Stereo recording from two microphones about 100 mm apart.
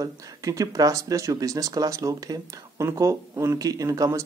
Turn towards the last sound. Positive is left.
turn(degrees=-35)  # may be behind; listen again after turning